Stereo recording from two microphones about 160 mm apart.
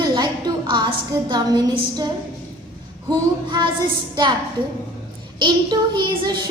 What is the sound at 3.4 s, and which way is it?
Speech, 30° right (ahead or behind).